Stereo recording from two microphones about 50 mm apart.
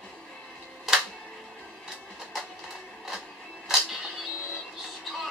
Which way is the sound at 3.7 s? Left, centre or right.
Centre.